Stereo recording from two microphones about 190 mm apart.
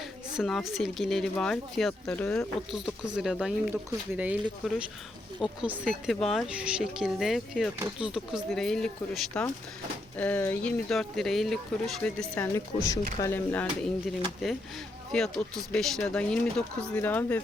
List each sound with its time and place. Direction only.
0.3 s speech: centre (ahead or behind)
12.5 s speech: 20° left (ahead or behind)
15.1 s speech: 5° left (ahead or behind)